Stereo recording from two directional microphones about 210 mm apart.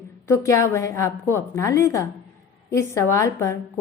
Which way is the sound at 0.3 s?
15° left (ahead or behind).